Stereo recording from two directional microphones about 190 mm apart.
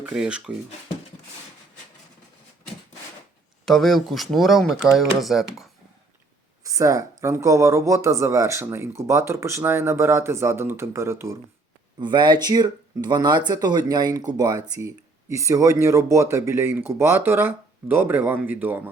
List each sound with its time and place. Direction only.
0.0 s speech: 5° right (ahead or behind)
3.7 s speech: centre (ahead or behind)
6.6 s speech: 15° right (ahead or behind)